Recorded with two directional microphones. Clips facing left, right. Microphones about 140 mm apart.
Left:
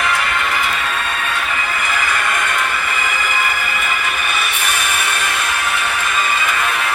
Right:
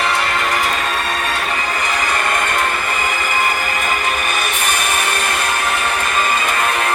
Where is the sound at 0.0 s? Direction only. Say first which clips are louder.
Right 1 dB; 30° right (ahead or behind).